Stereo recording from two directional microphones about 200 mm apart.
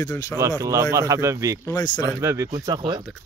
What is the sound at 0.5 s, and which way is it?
A man's voice, 15° right (ahead or behind).